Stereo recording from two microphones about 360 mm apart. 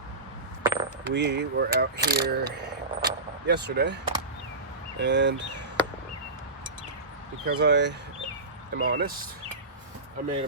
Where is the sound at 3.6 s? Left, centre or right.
Right.